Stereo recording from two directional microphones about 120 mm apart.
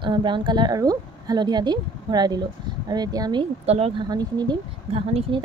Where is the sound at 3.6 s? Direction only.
60° right (ahead or behind).